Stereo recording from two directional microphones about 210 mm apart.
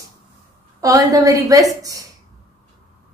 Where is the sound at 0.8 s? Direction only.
15° right (ahead or behind).